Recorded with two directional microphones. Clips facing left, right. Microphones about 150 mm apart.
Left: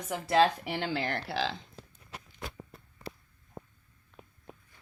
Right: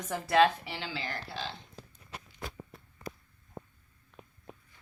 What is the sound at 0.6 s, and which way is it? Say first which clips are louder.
Speech: left 7 dB; 55° left (ahead or behind).